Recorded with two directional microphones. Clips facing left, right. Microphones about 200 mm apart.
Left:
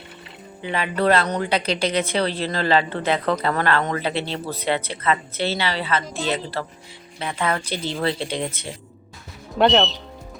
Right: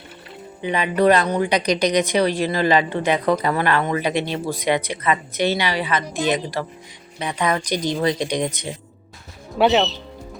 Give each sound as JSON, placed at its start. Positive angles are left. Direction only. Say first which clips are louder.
{"t": 0.6, "sound": "a woman's voice", "louder": "right 4 dB", "side_deg": -15}
{"t": 9.6, "sound": "speech", "louder": "right 1 dB", "side_deg": -5}